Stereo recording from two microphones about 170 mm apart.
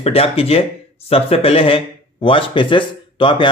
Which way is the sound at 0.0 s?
35° left (ahead or behind).